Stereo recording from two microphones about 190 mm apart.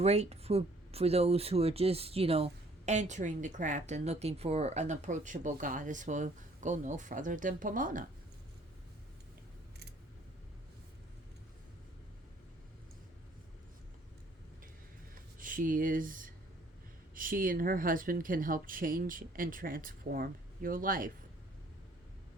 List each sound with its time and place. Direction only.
0.0 s speech: 35° right (ahead or behind)
15.4 s speech: 45° right (ahead or behind)